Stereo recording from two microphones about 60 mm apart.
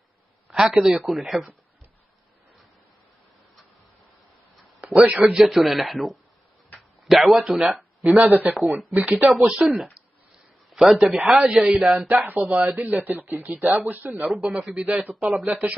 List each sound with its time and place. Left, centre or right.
0.5 s a man's voice: centre
5.0 s a man's voice: centre
5.4 s a man's voice: centre
12.9 s a man's voice: right
14.2 s a man's voice: centre
15.0 s a man's voice: right